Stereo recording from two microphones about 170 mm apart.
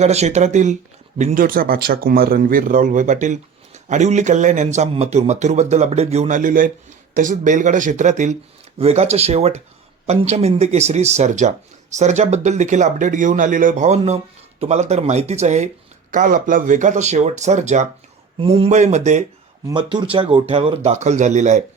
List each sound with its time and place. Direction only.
0.0 s speech: 40° right (ahead or behind)
16.1 s speech: 55° right (ahead or behind)
19.6 s speech: 25° right (ahead or behind); by 21.6 s 45° right (ahead or behind)